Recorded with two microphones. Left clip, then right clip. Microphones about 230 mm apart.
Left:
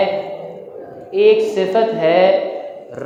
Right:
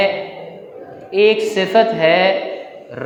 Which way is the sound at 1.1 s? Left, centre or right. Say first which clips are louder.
Left 1 dB; right.